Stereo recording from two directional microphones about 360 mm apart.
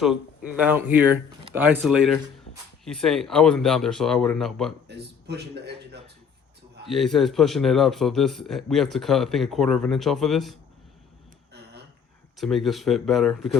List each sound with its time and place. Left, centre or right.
0.0 s a man's voice: centre
4.9 s speech: right
6.8 s a man's voice: centre
12.4 s a man's voice: centre